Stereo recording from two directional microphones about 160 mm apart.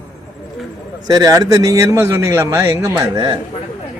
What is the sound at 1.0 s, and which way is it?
Speech, 25° right (ahead or behind).